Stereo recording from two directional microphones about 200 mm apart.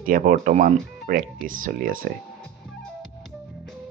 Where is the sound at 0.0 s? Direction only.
45° right (ahead or behind).